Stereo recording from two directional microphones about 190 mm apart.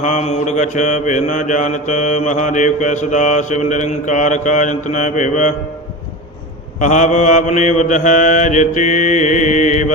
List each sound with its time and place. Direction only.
0.0 s mantra: 40° left (ahead or behind)
6.7 s mantra: 40° left (ahead or behind)